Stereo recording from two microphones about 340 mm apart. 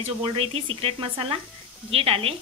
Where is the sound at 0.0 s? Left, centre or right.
Centre.